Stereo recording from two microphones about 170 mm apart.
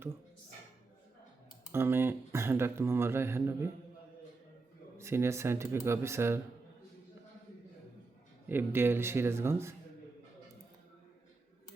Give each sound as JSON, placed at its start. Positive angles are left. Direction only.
{"t": 1.7, "sound": "speech", "side_deg": -15}
{"t": 4.9, "sound": "speech", "side_deg": -15}
{"t": 8.4, "sound": "speech", "side_deg": -15}